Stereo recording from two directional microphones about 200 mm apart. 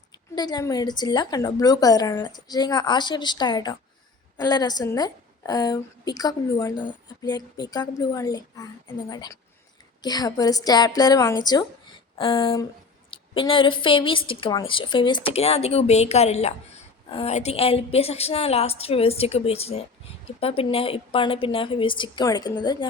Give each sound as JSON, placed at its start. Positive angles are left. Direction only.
{"t": 0.3, "sound": "a woman's voice", "side_deg": 20}